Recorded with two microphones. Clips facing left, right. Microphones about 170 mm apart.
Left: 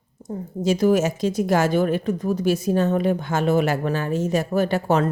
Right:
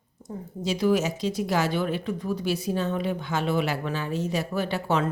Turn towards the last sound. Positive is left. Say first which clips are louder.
# left 6 dB
turn(degrees=45)  # may be behind; listen again after turning